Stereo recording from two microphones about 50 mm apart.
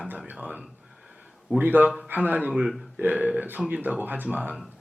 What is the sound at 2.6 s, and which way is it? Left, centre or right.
Speech, centre.